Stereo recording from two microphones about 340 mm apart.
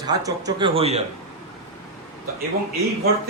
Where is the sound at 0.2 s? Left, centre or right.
Centre.